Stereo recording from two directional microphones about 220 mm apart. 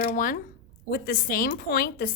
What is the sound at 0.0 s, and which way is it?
A woman's voice, 35° left (ahead or behind).